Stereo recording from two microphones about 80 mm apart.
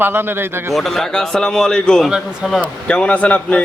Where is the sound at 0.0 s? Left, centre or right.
Right.